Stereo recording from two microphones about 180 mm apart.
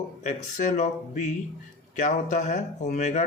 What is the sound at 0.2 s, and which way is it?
Speech, 45° left (ahead or behind).